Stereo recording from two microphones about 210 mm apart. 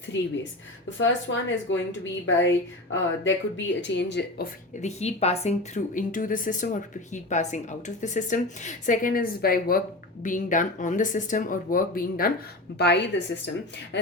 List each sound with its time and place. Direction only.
0.9 s a woman's voice: 60° left (ahead or behind)
4.8 s speech: 30° left (ahead or behind)
12.7 s a woman's voice: 55° left (ahead or behind)